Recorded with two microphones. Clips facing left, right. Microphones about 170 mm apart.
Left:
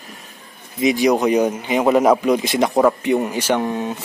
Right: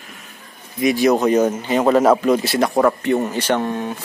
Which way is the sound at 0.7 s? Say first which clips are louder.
Even; 20° left (ahead or behind).